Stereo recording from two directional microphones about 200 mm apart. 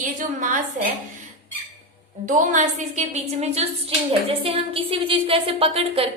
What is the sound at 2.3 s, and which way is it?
A woman's voice, 35° right (ahead or behind).